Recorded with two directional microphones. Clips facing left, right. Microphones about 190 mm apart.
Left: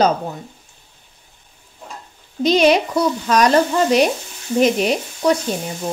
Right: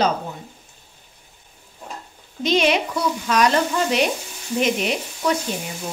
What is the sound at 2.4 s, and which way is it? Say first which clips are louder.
A woman's voice: left 5 dB; 40° left (ahead or behind).